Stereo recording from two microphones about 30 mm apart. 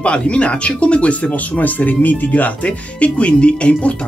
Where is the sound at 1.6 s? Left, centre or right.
Left.